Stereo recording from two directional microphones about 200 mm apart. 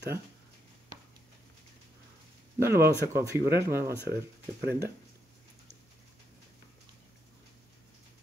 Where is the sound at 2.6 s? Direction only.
15° right (ahead or behind).